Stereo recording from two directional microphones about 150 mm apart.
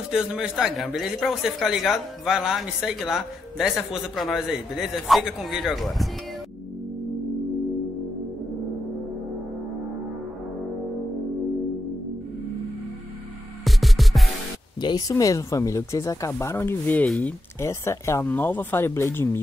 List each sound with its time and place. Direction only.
0.1 s speech: 5° right (ahead or behind)
13.7 s music: centre (ahead or behind)
14.8 s speech: 30° left (ahead or behind); by 17.3 s 5° left (ahead or behind)
17.6 s speech: 20° left (ahead or behind)